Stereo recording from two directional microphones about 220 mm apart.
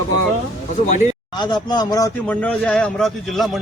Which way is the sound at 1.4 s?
20° left (ahead or behind).